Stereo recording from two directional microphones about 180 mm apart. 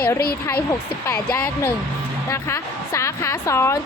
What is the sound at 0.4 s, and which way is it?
A woman's voice, 15° left (ahead or behind).